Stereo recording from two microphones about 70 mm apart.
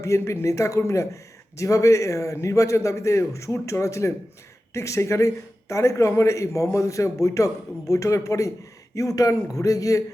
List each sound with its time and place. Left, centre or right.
0.0 s speech: left